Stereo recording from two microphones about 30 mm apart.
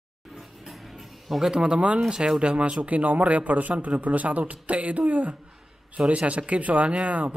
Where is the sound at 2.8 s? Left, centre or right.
Right.